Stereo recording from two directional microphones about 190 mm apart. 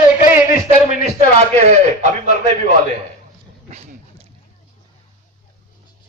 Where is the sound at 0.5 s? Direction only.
50° left (ahead or behind).